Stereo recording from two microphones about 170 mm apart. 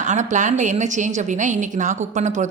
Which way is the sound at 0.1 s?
45° right (ahead or behind).